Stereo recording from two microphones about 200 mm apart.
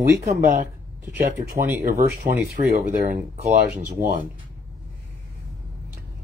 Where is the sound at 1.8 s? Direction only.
45° right (ahead or behind).